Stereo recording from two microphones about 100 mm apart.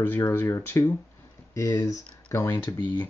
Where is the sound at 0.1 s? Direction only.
20° left (ahead or behind).